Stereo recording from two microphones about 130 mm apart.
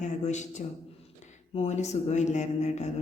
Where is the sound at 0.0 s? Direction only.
65° left (ahead or behind).